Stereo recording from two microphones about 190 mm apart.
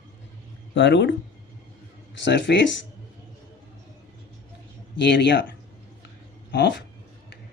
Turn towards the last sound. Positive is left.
turn(degrees=65)  # may be behind; listen again after turning